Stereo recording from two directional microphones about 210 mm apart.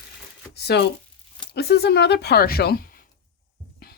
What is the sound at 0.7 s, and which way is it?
Speech, 55° left (ahead or behind).